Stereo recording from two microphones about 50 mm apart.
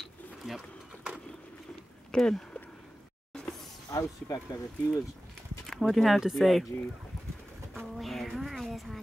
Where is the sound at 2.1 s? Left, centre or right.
Centre.